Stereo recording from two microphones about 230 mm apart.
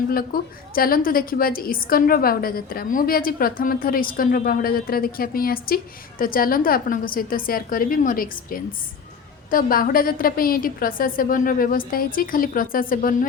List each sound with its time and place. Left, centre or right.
0.3 s a woman's voice: left